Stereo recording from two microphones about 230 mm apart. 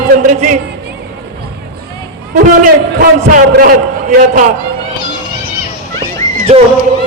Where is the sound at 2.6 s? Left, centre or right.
Right.